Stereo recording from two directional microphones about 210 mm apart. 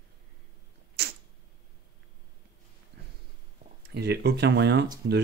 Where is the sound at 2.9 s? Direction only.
60° right (ahead or behind).